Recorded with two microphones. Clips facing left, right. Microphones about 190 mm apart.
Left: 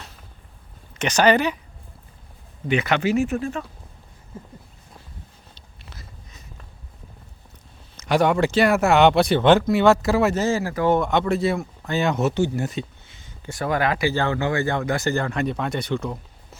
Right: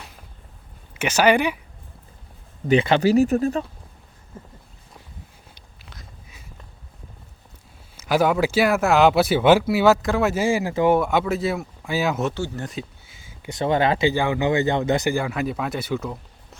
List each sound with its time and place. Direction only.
0.9 s speech: 10° right (ahead or behind)
2.6 s speech: 30° right (ahead or behind)
5.8 s a sound: centre (ahead or behind)
7.9 s speech: 5° right (ahead or behind)
10.4 s speech: 15° right (ahead or behind)
10.9 s speech: 5° right (ahead or behind)
12.3 s speech: 20° left (ahead or behind)
12.6 s a sound: centre (ahead or behind)
13.4 s speech: 20° right (ahead or behind)
14.1 s speech: 15° right (ahead or behind)